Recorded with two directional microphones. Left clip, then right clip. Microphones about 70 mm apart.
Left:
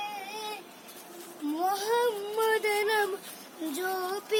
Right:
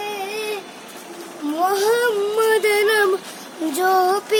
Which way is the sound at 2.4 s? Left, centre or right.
Right.